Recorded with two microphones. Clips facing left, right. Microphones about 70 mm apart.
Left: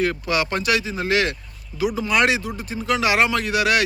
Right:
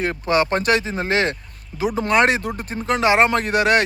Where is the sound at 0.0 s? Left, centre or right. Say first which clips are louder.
Right 2 dB; right.